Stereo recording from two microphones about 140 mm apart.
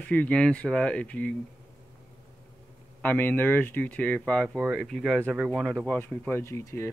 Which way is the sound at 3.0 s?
15° left (ahead or behind).